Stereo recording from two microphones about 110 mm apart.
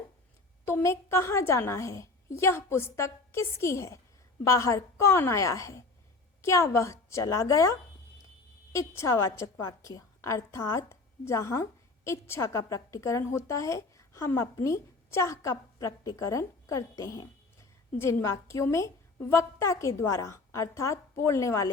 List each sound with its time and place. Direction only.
0.6 s a woman's voice: 25° left (ahead or behind)